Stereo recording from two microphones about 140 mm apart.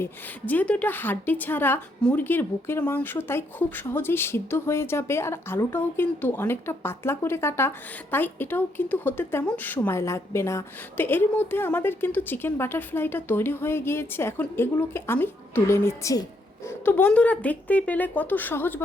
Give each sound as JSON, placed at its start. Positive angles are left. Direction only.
{"t": 0.0, "sound": "speech", "side_deg": 10}